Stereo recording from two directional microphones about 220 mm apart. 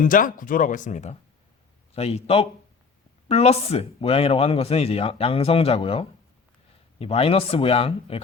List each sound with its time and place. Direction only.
0.0 s speech: 40° left (ahead or behind)